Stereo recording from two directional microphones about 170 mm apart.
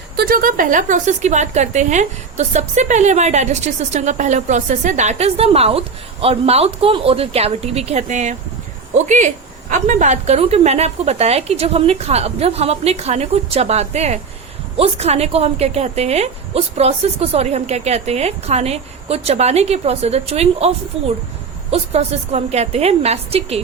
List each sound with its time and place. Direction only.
0.2 s a woman's voice: 60° right (ahead or behind); by 23.6 s 35° right (ahead or behind)